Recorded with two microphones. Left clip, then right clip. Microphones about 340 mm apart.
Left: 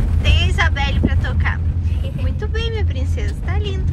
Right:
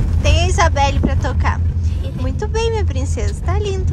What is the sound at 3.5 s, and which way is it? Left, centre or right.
Music, centre.